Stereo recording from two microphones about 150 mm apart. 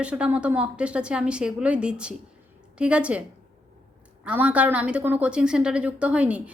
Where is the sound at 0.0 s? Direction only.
10° right (ahead or behind).